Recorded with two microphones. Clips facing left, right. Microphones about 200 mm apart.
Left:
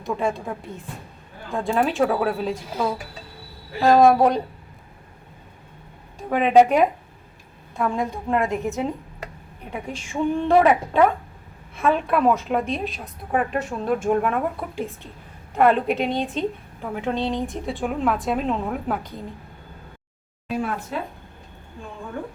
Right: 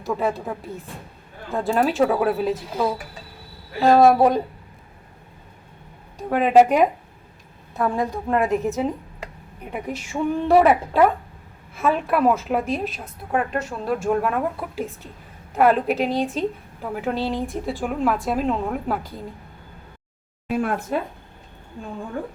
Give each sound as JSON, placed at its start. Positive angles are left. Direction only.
{"t": 0.0, "sound": "a woman's voice", "side_deg": 0}
{"t": 6.1, "sound": "a woman's voice", "side_deg": 0}
{"t": 7.9, "sound": "a woman's voice", "side_deg": 0}
{"t": 10.1, "sound": "a woman's voice", "side_deg": -5}
{"t": 20.5, "sound": "speech", "side_deg": -55}